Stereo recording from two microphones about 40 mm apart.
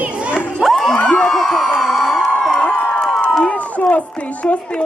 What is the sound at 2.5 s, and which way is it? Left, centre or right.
Crowd, left.